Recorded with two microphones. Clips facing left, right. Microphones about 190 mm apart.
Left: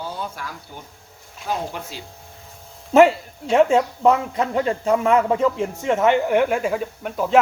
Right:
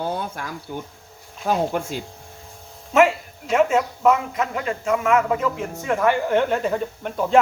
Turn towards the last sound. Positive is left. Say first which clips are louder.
# even
turn(degrees=0)  # may be behind; listen again after turning